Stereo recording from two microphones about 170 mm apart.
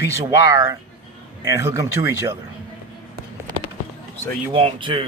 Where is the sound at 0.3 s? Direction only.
20° right (ahead or behind).